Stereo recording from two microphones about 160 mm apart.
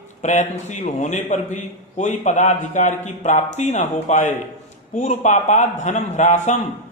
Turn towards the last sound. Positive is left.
turn(degrees=50)  # may be behind; listen again after turning